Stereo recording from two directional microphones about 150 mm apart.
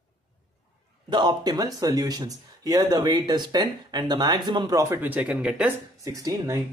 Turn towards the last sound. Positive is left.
turn(degrees=-20)  # may be behind; listen again after turning